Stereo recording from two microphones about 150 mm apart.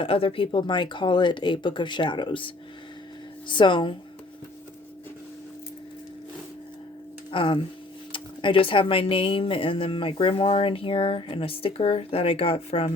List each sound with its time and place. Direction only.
0.0 s speech: 35° left (ahead or behind)
3.5 s speech: 30° left (ahead or behind)
7.3 s speech: 35° left (ahead or behind)